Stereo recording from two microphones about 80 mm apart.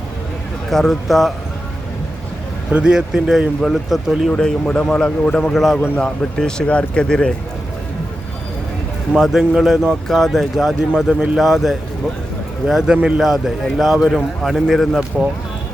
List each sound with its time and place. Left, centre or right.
0.7 s speech: centre
2.7 s a man's voice: centre
4.3 s speech: centre
9.1 s speech: centre